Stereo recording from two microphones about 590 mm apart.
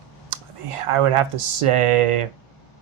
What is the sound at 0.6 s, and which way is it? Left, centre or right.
Speech, right.